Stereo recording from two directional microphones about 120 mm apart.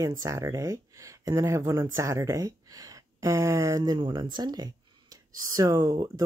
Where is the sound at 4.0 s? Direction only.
40° right (ahead or behind).